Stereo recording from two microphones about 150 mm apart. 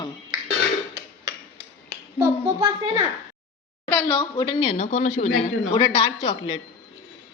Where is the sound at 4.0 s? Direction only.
25° left (ahead or behind).